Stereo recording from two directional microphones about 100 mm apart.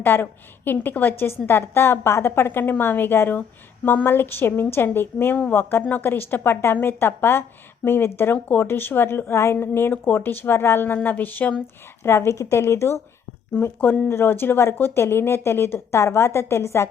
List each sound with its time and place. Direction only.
0.0 s a woman's voice: 20° left (ahead or behind)
12.0 s a woman's voice: 25° left (ahead or behind)
14.1 s a woman's voice: 25° left (ahead or behind)